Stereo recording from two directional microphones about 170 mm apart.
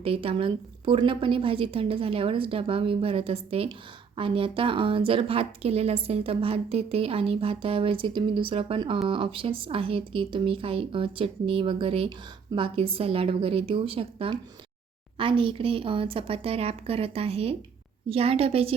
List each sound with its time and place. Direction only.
0.0 s a woman's voice: 35° right (ahead or behind)